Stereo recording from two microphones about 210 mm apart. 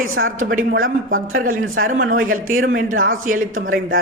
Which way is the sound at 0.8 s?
75° right (ahead or behind).